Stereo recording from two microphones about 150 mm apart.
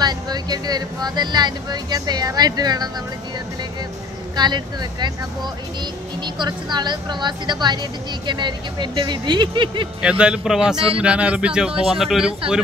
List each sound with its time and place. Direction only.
0.0 s speech: 25° right (ahead or behind)
4.4 s speech: 30° right (ahead or behind)
6.2 s speech: 30° right (ahead or behind)
10.0 s a man's voice: 5° right (ahead or behind)